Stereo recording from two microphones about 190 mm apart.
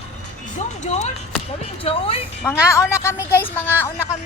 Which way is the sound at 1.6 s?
30° left (ahead or behind).